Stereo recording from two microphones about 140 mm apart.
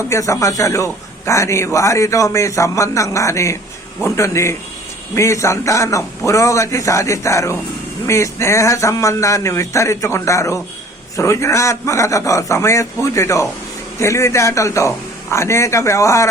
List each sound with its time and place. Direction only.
0.1 s a man's voice: 20° left (ahead or behind)